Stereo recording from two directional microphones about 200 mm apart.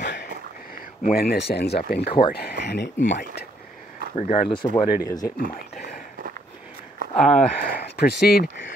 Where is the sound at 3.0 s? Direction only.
40° left (ahead or behind).